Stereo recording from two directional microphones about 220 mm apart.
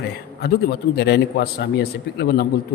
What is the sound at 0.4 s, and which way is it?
A man's voice, 45° left (ahead or behind).